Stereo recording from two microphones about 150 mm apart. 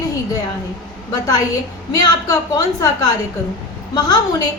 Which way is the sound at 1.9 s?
25° left (ahead or behind).